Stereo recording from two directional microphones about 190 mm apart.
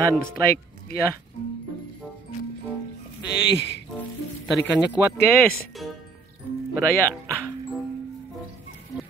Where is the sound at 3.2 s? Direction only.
65° left (ahead or behind).